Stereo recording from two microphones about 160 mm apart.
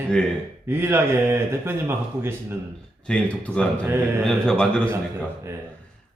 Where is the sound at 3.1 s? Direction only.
5° left (ahead or behind).